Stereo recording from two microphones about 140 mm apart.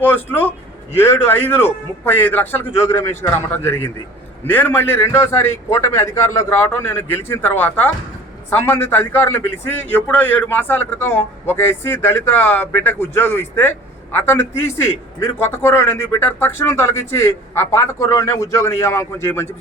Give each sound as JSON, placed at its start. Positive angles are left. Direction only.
{"t": 0.0, "sound": "a man's voice", "side_deg": 15}